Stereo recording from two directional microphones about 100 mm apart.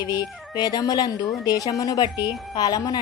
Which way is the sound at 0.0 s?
45° left (ahead or behind).